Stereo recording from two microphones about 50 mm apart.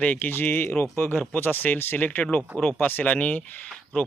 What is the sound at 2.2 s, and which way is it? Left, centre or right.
Speech, centre.